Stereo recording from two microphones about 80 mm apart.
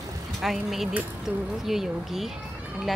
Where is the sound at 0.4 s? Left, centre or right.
Centre.